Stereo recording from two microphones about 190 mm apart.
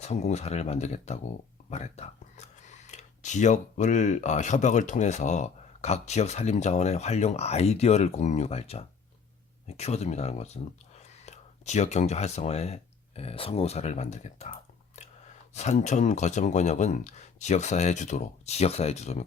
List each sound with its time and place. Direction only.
0.0 s speech: 35° left (ahead or behind)